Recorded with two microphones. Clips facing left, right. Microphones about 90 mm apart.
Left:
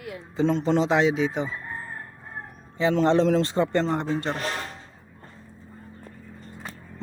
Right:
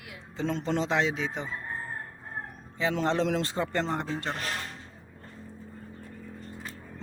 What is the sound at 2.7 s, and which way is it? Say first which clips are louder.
A man's voice: left 7 dB; centre (ahead or behind).